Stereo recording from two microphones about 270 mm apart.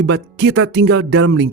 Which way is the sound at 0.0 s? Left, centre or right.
Right.